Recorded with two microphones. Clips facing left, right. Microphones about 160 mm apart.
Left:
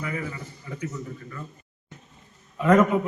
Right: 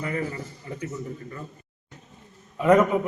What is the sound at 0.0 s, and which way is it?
Speech, 40° right (ahead or behind).